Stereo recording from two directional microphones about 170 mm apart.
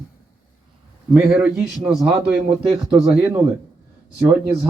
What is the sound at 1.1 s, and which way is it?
A man's voice, 5° right (ahead or behind).